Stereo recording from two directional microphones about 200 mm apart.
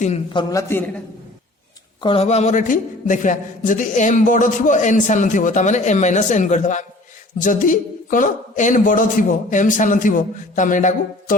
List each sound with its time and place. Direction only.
0.0 s a man's voice: 35° left (ahead or behind)
0.5 s a man's voice: 10° left (ahead or behind)
2.0 s a man's voice: 25° left (ahead or behind)